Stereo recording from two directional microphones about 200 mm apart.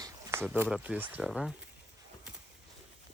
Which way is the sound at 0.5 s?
10° right (ahead or behind).